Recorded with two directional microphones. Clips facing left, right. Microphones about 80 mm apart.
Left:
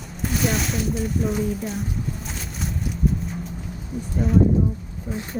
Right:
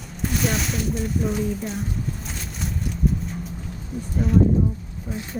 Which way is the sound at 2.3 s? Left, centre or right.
Centre.